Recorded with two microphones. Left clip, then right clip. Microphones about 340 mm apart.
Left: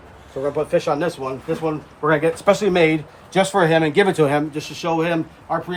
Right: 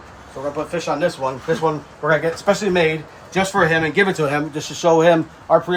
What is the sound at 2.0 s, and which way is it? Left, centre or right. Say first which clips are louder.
Speech: left 1 dB; left.